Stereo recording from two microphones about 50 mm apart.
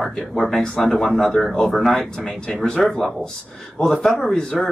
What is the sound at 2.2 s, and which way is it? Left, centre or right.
Speech, centre.